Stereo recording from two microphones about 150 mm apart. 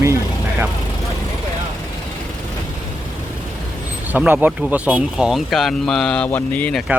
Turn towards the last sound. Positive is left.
turn(degrees=10)  # may be behind; listen again after turning